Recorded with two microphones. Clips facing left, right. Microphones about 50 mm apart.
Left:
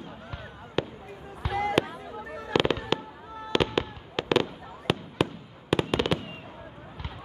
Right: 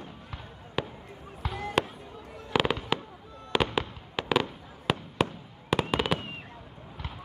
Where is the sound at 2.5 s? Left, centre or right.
Centre.